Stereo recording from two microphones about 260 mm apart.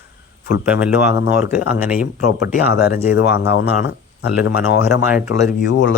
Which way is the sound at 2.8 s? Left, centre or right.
Left.